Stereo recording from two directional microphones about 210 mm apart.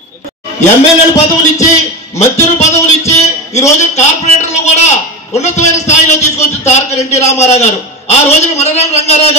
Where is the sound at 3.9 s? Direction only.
30° left (ahead or behind).